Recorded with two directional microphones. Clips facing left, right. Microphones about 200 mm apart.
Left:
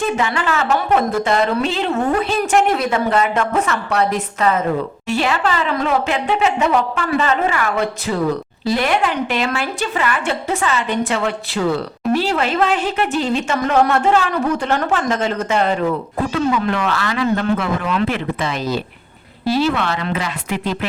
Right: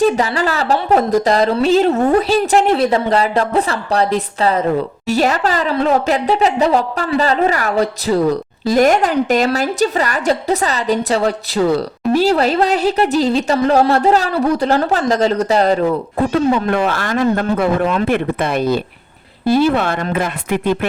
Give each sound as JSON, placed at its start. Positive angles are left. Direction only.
{"t": 0.0, "sound": "a woman's voice", "side_deg": -35}
{"t": 16.5, "sound": "speech", "side_deg": -50}